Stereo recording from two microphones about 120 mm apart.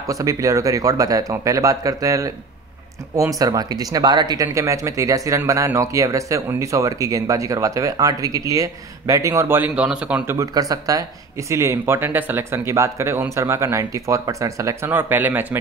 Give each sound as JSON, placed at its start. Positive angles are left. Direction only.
{"t": 0.1, "sound": "speech", "side_deg": -30}
{"t": 10.2, "sound": "speech", "side_deg": -25}